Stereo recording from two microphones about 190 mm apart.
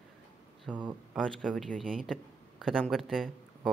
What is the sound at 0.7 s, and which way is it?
A man's voice, 5° left (ahead or behind).